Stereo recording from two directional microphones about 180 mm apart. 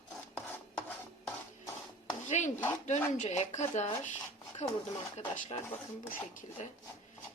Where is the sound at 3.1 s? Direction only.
40° left (ahead or behind).